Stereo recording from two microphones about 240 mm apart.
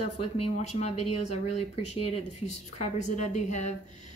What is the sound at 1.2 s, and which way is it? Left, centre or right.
A woman's voice, left.